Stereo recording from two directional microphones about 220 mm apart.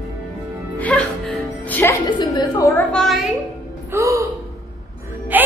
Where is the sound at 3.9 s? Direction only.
15° right (ahead or behind).